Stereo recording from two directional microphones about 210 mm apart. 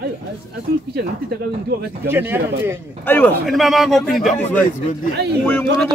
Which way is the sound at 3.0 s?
10° left (ahead or behind).